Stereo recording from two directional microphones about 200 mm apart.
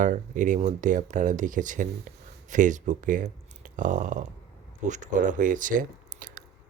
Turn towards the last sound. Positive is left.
turn(degrees=-40)  # may be behind; listen again after turning